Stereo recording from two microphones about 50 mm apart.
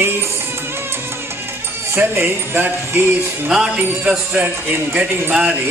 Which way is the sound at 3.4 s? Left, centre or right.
Centre.